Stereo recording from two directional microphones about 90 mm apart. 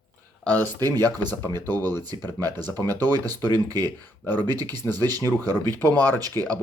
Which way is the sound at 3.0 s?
25° left (ahead or behind).